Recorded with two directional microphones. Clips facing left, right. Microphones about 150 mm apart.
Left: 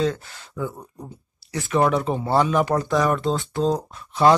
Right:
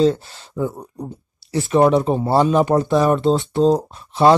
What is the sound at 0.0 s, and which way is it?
Speech, 25° right (ahead or behind).